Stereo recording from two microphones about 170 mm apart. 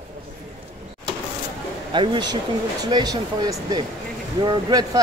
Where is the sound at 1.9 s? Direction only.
25° right (ahead or behind).